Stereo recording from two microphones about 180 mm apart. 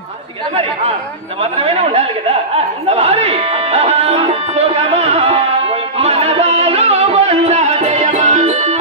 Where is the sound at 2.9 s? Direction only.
35° right (ahead or behind).